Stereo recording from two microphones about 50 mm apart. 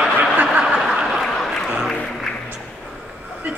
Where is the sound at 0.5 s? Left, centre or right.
Centre.